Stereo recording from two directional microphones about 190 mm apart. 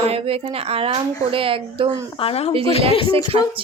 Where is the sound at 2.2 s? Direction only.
30° left (ahead or behind).